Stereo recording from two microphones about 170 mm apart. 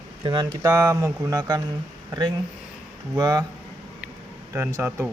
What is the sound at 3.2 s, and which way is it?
Speech, 20° right (ahead or behind).